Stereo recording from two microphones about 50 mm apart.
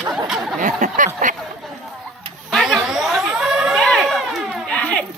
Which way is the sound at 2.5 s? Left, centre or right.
Centre.